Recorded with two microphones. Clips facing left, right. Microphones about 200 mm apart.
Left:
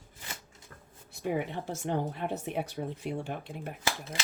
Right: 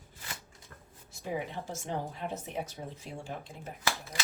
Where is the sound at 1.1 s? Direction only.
60° left (ahead or behind).